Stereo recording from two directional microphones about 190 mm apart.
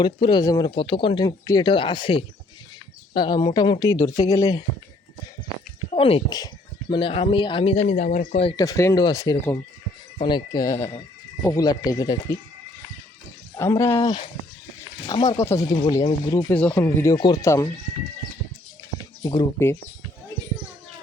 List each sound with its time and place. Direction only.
0.0 s speech: 25° left (ahead or behind)
5.9 s speech: 30° left (ahead or behind)
8.4 s speech: 20° left (ahead or behind)
13.6 s speech: 15° left (ahead or behind)
16.5 s speech: 10° left (ahead or behind)
19.2 s speech: 20° left (ahead or behind)